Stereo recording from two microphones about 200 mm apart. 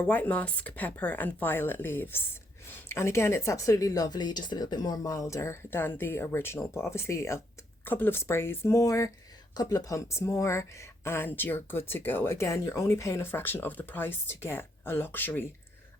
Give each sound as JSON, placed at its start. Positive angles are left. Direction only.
{"t": 0.0, "sound": "speech", "side_deg": 5}